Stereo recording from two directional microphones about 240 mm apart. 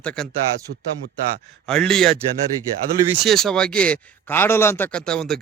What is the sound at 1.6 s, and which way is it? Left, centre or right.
Speech, centre.